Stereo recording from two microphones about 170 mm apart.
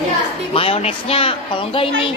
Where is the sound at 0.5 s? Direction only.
35° left (ahead or behind).